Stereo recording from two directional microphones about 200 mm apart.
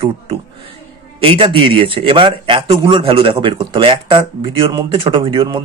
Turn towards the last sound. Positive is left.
turn(degrees=-25)  # may be behind; listen again after turning